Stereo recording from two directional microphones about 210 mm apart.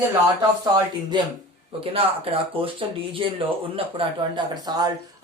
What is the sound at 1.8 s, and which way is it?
Speech, 25° right (ahead or behind).